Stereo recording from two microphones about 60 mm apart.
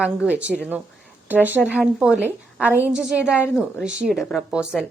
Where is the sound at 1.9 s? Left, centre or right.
Centre.